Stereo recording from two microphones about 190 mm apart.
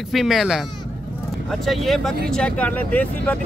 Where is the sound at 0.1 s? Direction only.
Centre (ahead or behind).